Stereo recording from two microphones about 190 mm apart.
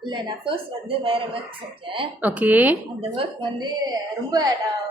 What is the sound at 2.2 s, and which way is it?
Speech, 10° right (ahead or behind).